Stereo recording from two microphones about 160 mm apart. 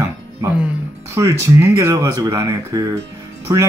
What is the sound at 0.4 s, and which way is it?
Speech, 15° right (ahead or behind).